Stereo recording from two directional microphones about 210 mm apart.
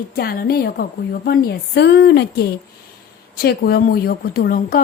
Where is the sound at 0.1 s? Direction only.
45° left (ahead or behind).